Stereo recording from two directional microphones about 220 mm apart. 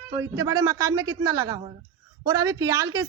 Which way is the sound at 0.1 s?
15° right (ahead or behind).